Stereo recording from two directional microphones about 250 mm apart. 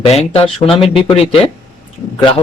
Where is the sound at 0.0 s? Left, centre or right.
Left.